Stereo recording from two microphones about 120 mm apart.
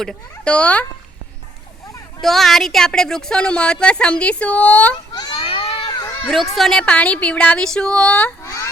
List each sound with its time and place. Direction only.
0.0 s speech: 5° left (ahead or behind)
2.2 s speech: centre (ahead or behind)
5.1 s a sound: 40° left (ahead or behind); by 5.9 s 55° left (ahead or behind)
5.9 s children playing: 35° left (ahead or behind)
6.6 s speech: 5° left (ahead or behind)
8.4 s a sound: 25° left (ahead or behind)